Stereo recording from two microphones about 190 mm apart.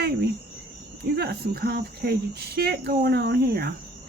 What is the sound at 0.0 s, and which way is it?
Cricket, 60° right (ahead or behind).